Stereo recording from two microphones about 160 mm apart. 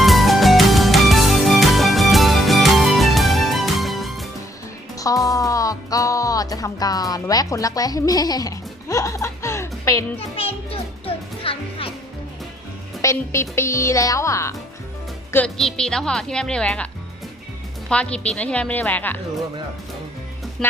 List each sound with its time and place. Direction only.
0.0 s music: centre (ahead or behind)
4.9 s music: 20° left (ahead or behind)
10.2 s music: 35° left (ahead or behind)
13.0 s speech: 20° left (ahead or behind)
15.4 s speech: centre (ahead or behind)
20.6 s speech: 5° left (ahead or behind)